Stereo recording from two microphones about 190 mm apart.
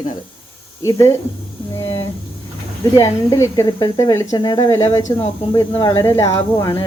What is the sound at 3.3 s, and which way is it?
A woman's voice, 20° left (ahead or behind).